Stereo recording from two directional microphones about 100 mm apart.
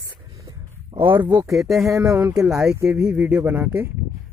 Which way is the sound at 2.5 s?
25° right (ahead or behind).